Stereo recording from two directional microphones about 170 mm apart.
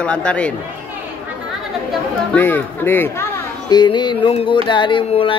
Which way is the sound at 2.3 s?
10° left (ahead or behind).